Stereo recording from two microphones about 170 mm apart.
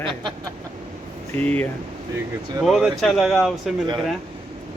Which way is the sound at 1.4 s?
10° left (ahead or behind).